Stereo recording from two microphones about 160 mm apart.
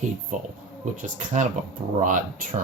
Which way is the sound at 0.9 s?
55° right (ahead or behind).